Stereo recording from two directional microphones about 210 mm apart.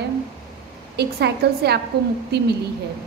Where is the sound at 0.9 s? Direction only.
50° right (ahead or behind).